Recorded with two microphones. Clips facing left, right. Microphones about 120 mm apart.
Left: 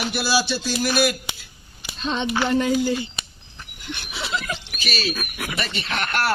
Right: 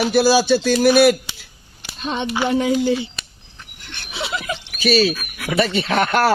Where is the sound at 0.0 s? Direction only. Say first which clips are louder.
Right 8 dB; 40° right (ahead or behind).